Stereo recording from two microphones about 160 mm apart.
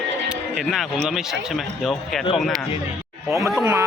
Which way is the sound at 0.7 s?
Centre (ahead or behind).